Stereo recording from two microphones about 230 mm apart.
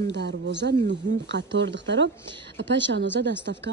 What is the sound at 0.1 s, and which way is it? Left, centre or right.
A woman's voice, right.